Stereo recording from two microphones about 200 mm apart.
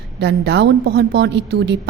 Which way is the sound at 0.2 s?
60° right (ahead or behind).